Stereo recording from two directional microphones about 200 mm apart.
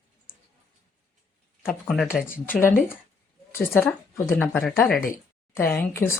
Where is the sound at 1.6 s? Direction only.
Centre (ahead or behind).